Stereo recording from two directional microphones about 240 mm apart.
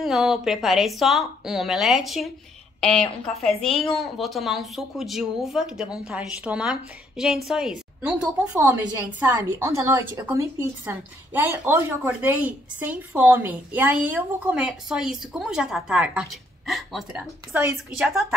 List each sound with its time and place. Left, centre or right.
0.0 s a woman's voice: centre